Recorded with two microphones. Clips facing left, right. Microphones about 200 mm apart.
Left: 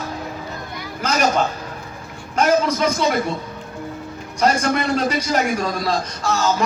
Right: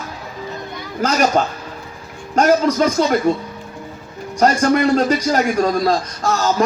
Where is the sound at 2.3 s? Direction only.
45° right (ahead or behind).